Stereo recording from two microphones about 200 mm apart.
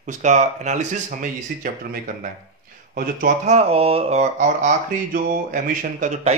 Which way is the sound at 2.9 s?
40° right (ahead or behind).